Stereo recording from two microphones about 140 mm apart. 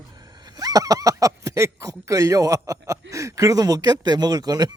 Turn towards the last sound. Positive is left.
turn(degrees=-30)  # may be behind; listen again after turning